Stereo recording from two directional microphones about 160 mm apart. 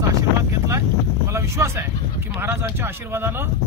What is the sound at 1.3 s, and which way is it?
Speech, 20° right (ahead or behind).